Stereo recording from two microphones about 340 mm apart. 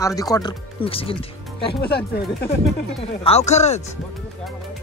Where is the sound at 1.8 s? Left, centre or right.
Left.